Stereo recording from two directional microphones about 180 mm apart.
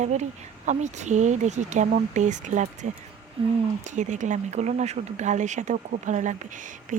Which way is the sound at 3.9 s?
40° right (ahead or behind).